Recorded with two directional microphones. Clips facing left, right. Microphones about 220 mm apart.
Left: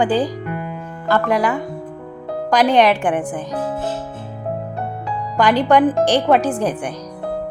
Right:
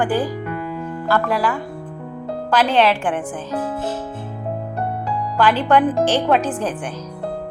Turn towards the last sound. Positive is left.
turn(degrees=10)  # may be behind; listen again after turning